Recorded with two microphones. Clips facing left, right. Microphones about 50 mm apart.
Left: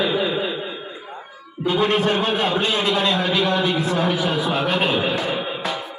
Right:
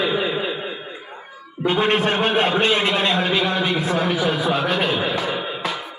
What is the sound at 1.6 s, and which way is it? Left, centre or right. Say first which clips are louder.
A man's voice: even; right.